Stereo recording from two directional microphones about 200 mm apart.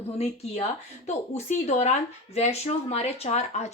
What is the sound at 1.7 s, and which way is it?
Speech, 35° left (ahead or behind).